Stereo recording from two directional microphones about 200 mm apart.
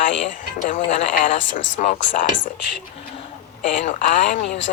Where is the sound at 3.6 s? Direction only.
40° left (ahead or behind).